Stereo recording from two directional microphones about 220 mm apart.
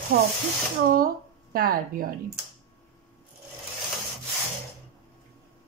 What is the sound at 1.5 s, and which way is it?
Speech, 40° right (ahead or behind).